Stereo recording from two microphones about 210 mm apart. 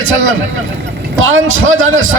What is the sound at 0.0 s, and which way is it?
A man's voice, 70° right (ahead or behind).